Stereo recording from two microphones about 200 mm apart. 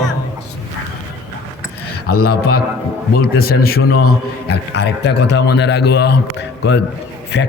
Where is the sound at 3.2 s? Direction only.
50° left (ahead or behind).